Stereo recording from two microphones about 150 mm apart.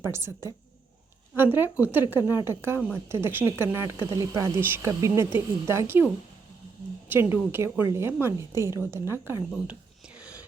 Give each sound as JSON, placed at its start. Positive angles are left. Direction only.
{"t": 0.0, "sound": "a woman's voice", "side_deg": -15}
{"t": 7.1, "sound": "a woman's voice", "side_deg": -15}
{"t": 10.2, "sound": "whispering", "side_deg": -10}